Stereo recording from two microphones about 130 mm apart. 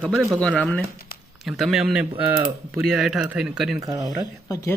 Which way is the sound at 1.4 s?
Centre (ahead or behind).